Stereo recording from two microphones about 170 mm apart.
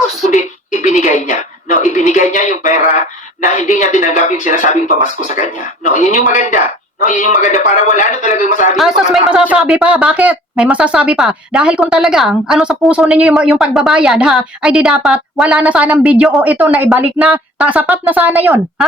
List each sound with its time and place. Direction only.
0.3 s a sound: 45° left (ahead or behind)
3.4 s a man's voice: 45° left (ahead or behind)
8.7 s speech: 5° right (ahead or behind)